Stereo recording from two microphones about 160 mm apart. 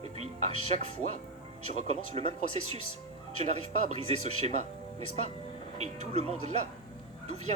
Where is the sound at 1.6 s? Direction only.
40° right (ahead or behind).